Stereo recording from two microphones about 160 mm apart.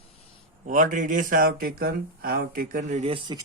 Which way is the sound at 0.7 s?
55° right (ahead or behind).